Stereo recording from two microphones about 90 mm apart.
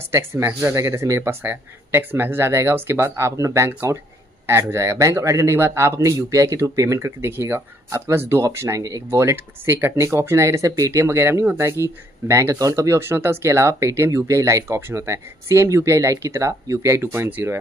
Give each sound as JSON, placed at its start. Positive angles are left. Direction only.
{"t": 0.1, "sound": "speech", "side_deg": -30}
{"t": 1.4, "sound": "speech", "side_deg": -25}
{"t": 9.2, "sound": "speech", "side_deg": -25}